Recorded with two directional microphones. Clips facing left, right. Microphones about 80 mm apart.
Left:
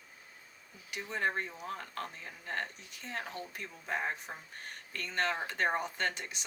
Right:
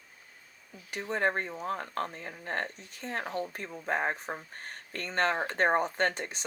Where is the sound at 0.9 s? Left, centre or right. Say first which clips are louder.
Right 5 dB; right.